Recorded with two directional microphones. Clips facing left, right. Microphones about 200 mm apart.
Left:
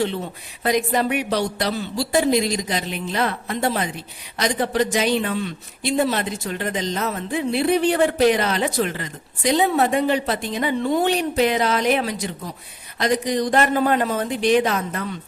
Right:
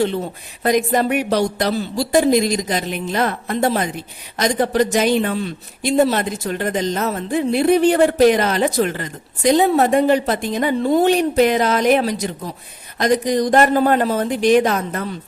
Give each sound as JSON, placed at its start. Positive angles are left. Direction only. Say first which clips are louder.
{"t": 0.6, "sound": "speech", "louder": "right 4 dB", "side_deg": -45}